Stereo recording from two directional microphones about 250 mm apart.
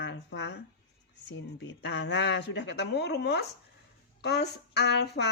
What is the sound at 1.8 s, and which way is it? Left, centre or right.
Speech, left.